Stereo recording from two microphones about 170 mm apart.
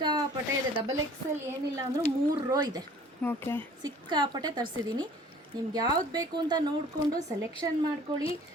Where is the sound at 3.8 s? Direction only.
25° right (ahead or behind).